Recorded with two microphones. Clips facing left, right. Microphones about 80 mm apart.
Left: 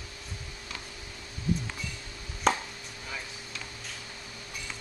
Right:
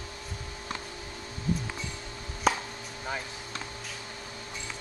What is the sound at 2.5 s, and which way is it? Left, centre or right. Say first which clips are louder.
Chop: even; centre.